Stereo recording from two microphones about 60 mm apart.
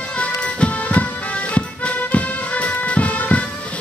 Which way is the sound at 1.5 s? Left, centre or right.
Left.